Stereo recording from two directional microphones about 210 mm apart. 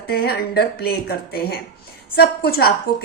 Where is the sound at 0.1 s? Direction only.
50° left (ahead or behind).